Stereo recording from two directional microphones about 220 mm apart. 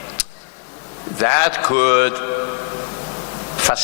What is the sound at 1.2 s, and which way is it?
Speech, 15° left (ahead or behind).